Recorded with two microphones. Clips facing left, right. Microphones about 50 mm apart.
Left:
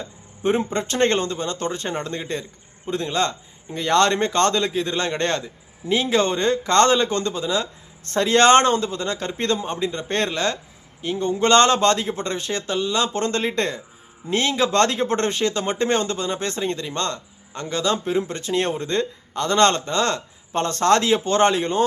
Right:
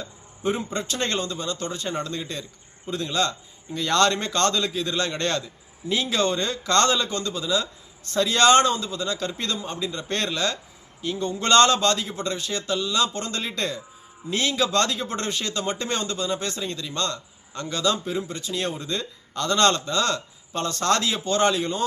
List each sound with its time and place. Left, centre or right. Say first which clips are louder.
0.0 s a man's voice: left 3 dB; left
19.3 s speech: left 3 dB; left